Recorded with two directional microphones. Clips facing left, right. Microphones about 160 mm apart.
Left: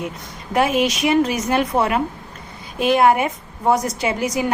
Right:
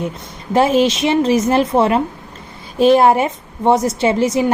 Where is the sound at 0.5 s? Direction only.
30° right (ahead or behind).